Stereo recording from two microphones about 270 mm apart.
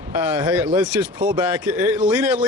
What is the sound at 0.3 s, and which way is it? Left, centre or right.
Speech, centre.